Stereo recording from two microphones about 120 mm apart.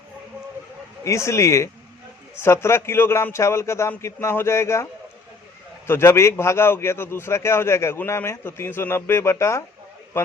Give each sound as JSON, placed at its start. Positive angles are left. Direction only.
{"t": 1.0, "sound": "a man's voice", "side_deg": 25}
{"t": 5.9, "sound": "a man's voice", "side_deg": 20}